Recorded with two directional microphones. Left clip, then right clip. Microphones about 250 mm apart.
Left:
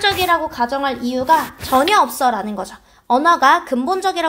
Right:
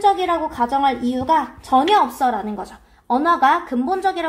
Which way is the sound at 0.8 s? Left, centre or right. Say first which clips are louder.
Right 1 dB; left.